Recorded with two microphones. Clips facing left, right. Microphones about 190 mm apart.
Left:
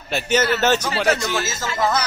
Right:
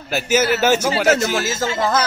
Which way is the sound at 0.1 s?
5° right (ahead or behind).